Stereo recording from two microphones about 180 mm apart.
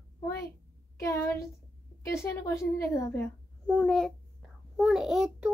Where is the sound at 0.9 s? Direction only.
15° left (ahead or behind).